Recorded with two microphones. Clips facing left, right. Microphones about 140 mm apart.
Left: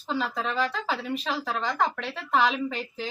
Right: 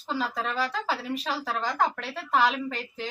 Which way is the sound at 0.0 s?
5° right (ahead or behind).